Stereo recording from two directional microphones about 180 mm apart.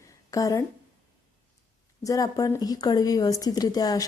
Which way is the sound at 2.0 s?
20° left (ahead or behind).